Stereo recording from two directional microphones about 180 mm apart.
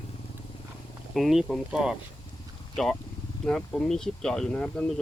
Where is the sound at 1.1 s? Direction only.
Centre (ahead or behind).